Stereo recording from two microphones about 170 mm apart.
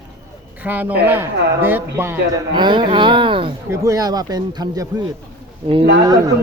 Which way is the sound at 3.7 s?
20° right (ahead or behind).